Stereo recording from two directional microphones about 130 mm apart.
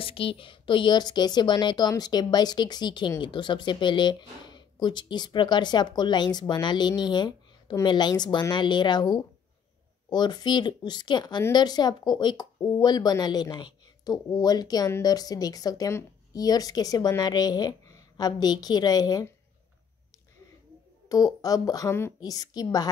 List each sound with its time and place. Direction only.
0.0 s speech: 45° left (ahead or behind)
21.4 s a woman's voice: 30° left (ahead or behind)